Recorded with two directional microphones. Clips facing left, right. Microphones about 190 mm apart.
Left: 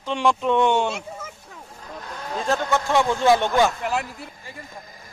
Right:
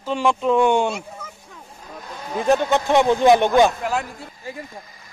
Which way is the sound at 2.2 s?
15° right (ahead or behind).